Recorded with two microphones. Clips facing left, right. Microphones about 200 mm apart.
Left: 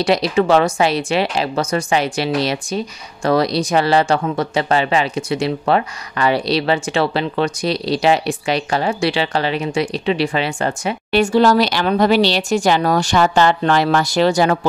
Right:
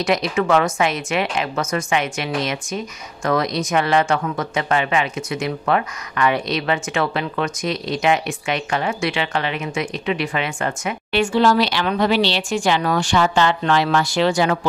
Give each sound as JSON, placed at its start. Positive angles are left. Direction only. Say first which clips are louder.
{"t": 0.0, "sound": "speech", "louder": "left 4 dB", "side_deg": 30}